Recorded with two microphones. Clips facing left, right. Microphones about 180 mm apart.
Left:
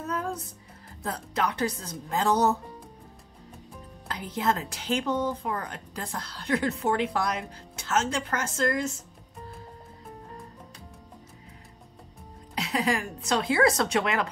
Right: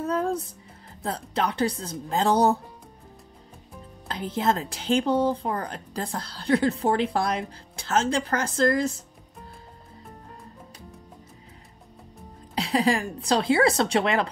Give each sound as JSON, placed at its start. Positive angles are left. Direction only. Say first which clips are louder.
{"t": 0.0, "sound": "music", "louder": "right 6 dB", "side_deg": -30}
{"t": 1.0, "sound": "a woman's voice", "louder": "right 2 dB", "side_deg": -30}
{"t": 4.1, "sound": "speech", "louder": "right 3 dB", "side_deg": -30}
{"t": 12.5, "sound": "speech", "louder": "right 4 dB", "side_deg": -30}